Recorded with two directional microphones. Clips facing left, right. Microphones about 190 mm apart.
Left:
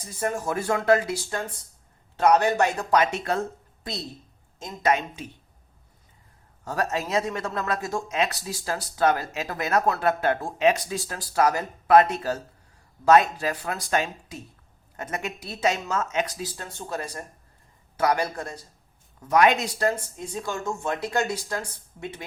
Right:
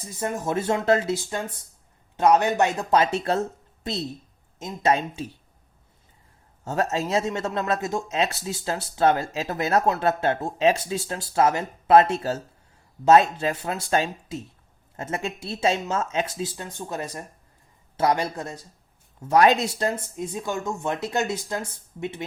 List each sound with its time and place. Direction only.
0.2 s speech: 20° right (ahead or behind)
6.7 s speech: 25° right (ahead or behind)